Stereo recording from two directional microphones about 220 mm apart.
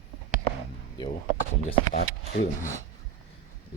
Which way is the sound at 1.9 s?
40° left (ahead or behind).